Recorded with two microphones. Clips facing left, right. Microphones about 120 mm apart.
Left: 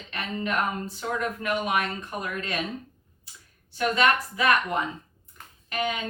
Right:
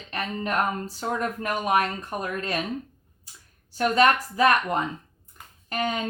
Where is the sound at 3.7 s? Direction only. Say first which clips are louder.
Right 3 dB; 40° right (ahead or behind).